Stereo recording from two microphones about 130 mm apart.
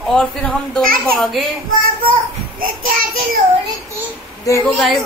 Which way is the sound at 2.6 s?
90° right.